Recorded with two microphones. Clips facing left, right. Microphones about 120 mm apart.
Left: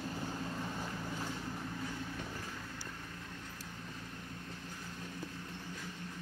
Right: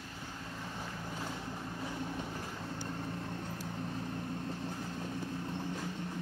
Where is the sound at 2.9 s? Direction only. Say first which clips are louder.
Right 8 dB; 40° right (ahead or behind).